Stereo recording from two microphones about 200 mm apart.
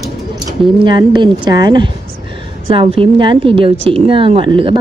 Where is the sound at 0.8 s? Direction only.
25° right (ahead or behind).